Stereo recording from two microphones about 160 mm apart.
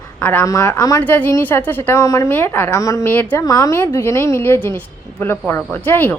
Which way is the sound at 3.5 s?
20° left (ahead or behind).